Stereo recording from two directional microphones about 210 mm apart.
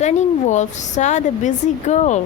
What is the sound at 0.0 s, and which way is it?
Speech, 35° left (ahead or behind).